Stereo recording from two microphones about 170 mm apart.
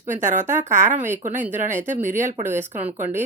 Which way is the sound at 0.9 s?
45° right (ahead or behind).